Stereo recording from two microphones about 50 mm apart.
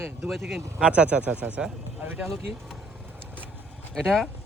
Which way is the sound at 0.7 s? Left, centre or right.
Right.